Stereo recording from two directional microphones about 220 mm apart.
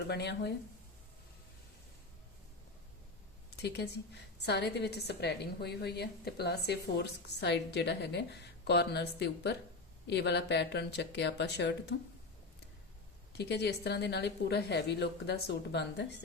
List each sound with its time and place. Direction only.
0.1 s a woman's voice: 50° left (ahead or behind)
3.6 s a woman's voice: 50° left (ahead or behind)
13.3 s a woman's voice: 50° left (ahead or behind)